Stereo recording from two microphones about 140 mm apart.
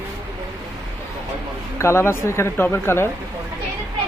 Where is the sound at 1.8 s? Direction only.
20° left (ahead or behind).